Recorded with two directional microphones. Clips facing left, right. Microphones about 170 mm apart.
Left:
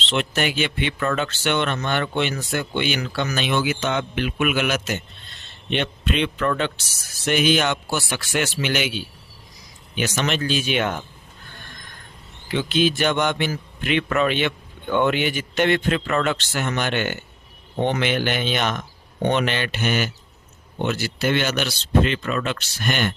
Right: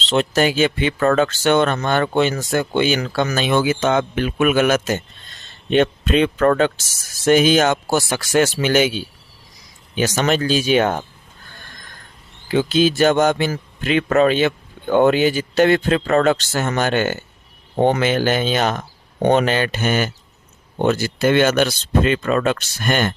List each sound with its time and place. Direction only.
0.1 s a man's voice: 40° right (ahead or behind)
10.0 s a man's voice: 40° right (ahead or behind)
12.5 s a man's voice: 40° right (ahead or behind)